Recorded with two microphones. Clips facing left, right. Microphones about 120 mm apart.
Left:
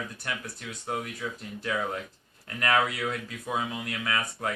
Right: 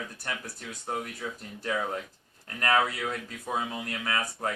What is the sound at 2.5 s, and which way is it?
Speech, 35° right (ahead or behind).